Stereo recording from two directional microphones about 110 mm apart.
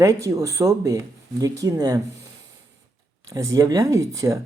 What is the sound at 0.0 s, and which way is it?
Speech, 30° right (ahead or behind).